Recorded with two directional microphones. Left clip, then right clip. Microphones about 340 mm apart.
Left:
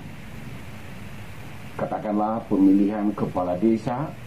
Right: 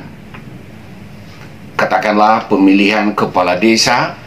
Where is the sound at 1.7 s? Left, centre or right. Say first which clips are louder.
Right 14 dB; centre.